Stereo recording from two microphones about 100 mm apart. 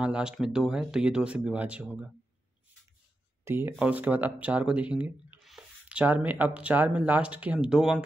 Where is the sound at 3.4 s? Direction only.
25° right (ahead or behind).